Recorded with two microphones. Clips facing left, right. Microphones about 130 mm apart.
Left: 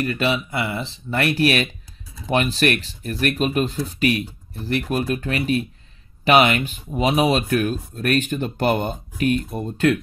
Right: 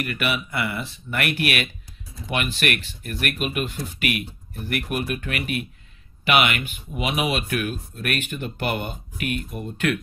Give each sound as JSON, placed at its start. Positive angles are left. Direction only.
{"t": 0.0, "sound": "speech", "side_deg": 30}